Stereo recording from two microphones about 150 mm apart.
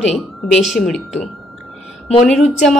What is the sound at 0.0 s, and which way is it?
A woman's voice, 5° left (ahead or behind).